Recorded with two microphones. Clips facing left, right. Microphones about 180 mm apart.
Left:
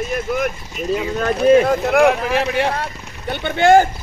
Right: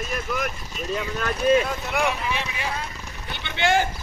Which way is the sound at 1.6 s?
90° left.